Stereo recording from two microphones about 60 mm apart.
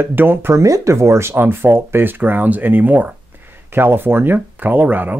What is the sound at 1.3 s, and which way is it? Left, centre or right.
Speech, right.